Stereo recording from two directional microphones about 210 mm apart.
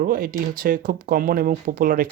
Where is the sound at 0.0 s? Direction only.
45° right (ahead or behind).